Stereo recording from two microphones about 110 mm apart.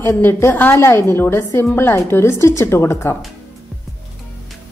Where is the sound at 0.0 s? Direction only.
25° left (ahead or behind).